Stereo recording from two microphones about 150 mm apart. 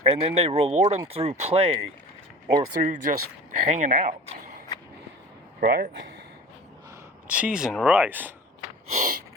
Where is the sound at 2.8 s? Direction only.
60° right (ahead or behind).